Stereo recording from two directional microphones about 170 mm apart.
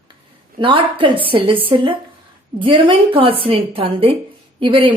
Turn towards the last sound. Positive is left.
turn(degrees=-30)  # may be behind; listen again after turning